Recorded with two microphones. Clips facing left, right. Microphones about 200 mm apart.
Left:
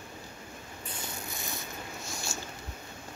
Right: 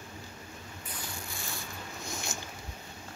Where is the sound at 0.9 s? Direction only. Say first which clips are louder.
Left 2 dB; 20° left (ahead or behind).